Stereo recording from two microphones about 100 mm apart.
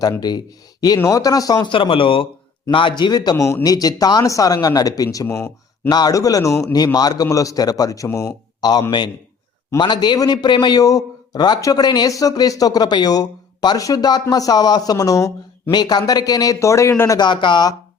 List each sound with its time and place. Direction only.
0.2 s a man's voice: 45° left (ahead or behind)
1.6 s a man's voice: 60° left (ahead or behind); by 3.3 s 45° left (ahead or behind)
3.3 s a man's voice: 30° left (ahead or behind)
17.1 s speech: 50° left (ahead or behind)